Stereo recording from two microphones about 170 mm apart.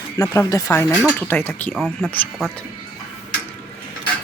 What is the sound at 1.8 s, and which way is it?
Speech, 5° right (ahead or behind).